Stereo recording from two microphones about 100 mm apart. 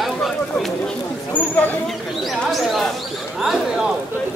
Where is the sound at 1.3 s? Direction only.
15° left (ahead or behind).